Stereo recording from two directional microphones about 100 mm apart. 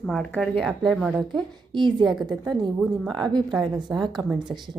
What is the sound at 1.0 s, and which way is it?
A woman's voice, 10° right (ahead or behind).